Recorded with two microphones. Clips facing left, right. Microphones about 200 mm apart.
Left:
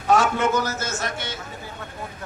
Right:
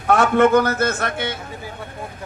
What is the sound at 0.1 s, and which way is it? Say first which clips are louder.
A man's voice: right 6 dB; 55° right (ahead or behind).